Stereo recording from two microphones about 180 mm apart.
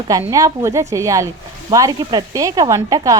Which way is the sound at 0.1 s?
20° right (ahead or behind).